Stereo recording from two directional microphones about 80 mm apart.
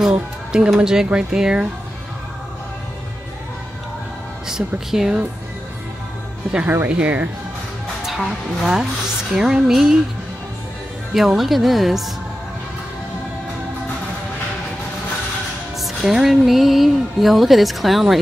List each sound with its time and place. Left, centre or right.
0.0 s speech: centre
4.5 s speech: centre
6.5 s speech: right
8.1 s speech: centre
11.1 s speech: centre
15.8 s speech: centre